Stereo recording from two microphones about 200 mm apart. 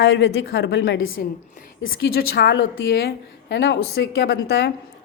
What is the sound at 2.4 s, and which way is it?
A woman's voice, 55° left (ahead or behind).